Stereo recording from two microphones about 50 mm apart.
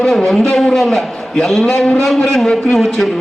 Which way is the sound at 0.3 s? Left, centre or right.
Centre.